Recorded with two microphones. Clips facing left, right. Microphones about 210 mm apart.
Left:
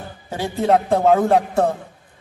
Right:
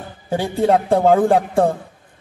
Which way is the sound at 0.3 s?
30° right (ahead or behind).